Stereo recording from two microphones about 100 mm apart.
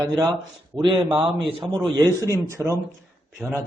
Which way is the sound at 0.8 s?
50° right (ahead or behind).